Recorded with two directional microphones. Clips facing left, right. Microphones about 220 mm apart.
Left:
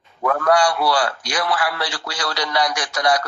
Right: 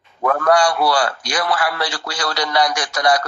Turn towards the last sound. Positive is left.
turn(degrees=-45)  # may be behind; listen again after turning